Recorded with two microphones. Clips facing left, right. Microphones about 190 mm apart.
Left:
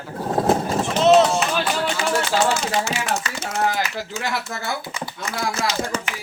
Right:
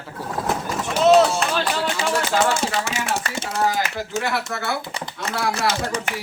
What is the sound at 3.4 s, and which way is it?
Speech, 55° right (ahead or behind).